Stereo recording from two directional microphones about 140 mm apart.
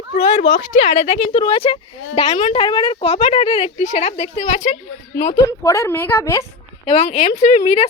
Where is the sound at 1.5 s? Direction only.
40° left (ahead or behind).